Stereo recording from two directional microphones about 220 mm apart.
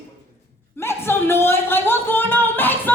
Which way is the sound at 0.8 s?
10° left (ahead or behind).